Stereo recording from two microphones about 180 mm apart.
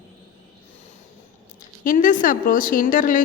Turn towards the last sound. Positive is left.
turn(degrees=50)  # may be behind; listen again after turning